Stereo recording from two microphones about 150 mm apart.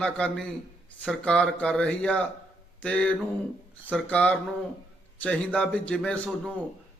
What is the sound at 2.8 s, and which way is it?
Mantra, 5° left (ahead or behind).